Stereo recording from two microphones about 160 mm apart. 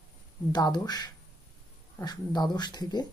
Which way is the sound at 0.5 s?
25° left (ahead or behind).